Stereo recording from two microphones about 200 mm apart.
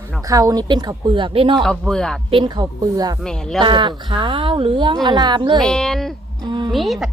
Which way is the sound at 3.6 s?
25° right (ahead or behind).